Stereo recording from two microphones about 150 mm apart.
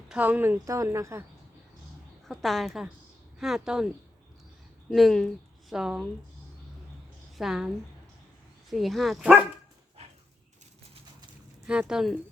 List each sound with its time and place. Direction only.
0.1 s speech: 10° right (ahead or behind)
2.2 s speech: centre (ahead or behind)
4.9 s a woman's voice: centre (ahead or behind)
7.3 s speech: centre (ahead or behind)
8.7 s speech: centre (ahead or behind)
11.6 s speech: 5° right (ahead or behind)